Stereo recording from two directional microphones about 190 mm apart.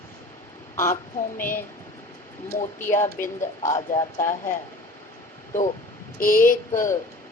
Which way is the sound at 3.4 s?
15° left (ahead or behind).